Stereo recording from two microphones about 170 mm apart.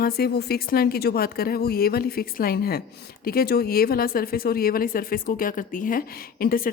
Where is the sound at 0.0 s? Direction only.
65° left (ahead or behind).